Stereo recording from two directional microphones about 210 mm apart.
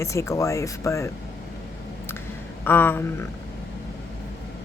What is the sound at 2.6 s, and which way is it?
Speech, 10° left (ahead or behind).